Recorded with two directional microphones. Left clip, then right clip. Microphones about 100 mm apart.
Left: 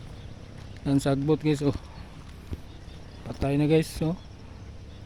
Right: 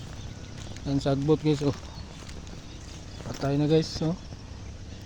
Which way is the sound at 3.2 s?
50° left (ahead or behind).